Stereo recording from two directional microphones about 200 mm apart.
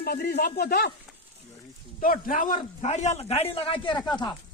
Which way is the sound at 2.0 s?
45° left (ahead or behind).